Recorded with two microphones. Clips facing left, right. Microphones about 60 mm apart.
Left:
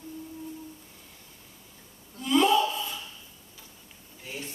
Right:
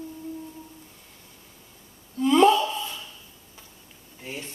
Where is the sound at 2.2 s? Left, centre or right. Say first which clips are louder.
Right 5 dB; right.